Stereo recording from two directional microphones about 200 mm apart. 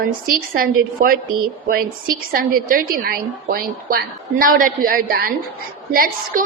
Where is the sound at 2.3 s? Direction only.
45° right (ahead or behind).